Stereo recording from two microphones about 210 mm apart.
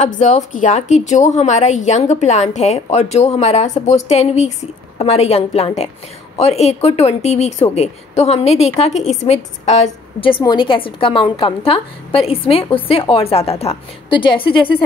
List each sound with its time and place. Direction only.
0.0 s a woman's voice: 35° left (ahead or behind)